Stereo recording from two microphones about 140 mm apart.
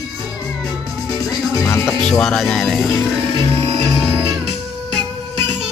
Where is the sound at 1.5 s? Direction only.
25° left (ahead or behind).